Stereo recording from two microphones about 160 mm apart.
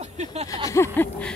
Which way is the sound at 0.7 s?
15° left (ahead or behind).